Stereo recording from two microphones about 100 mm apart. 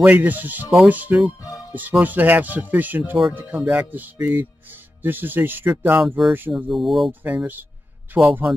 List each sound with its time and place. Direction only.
0.0 s speech: 15° right (ahead or behind)
6.5 s speech: centre (ahead or behind)
7.1 s speech: 15° right (ahead or behind)